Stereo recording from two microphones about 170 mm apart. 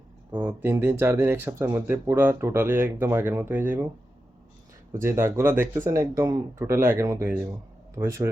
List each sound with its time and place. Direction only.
0.3 s speech: 15° right (ahead or behind)
5.0 s speech: 15° right (ahead or behind)